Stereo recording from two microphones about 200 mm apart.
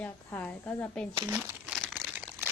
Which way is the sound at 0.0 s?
10° left (ahead or behind).